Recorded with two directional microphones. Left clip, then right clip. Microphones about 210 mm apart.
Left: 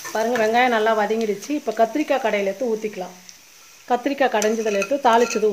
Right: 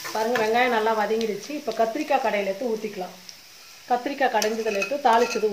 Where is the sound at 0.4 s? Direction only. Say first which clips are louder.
Left 4 dB; 50° left (ahead or behind).